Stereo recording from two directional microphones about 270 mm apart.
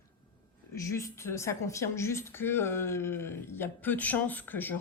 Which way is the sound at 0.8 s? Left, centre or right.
Centre.